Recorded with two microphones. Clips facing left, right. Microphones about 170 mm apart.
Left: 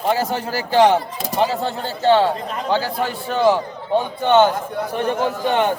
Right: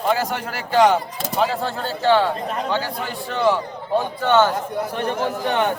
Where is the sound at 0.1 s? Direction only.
30° left (ahead or behind).